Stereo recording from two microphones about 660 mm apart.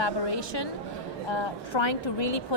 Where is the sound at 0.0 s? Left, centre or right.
Left.